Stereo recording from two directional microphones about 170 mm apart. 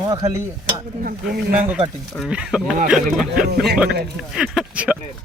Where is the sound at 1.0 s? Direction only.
55° right (ahead or behind).